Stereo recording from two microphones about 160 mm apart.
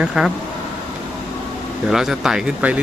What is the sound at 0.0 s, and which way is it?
Speech, 5° right (ahead or behind).